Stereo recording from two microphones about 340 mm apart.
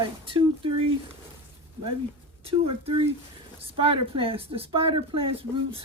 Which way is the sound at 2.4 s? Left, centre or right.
Centre.